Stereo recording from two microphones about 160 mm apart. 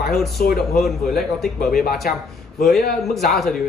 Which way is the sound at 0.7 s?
Centre (ahead or behind).